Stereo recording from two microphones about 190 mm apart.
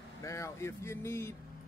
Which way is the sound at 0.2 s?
15° left (ahead or behind).